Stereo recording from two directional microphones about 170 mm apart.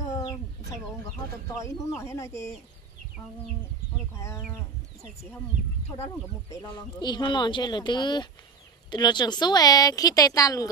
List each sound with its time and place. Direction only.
0.0 s chicken: 20° left (ahead or behind)
1.5 s speech: 20° left (ahead or behind)
4.1 s speech: 15° left (ahead or behind)
6.5 s speech: 25° left (ahead or behind)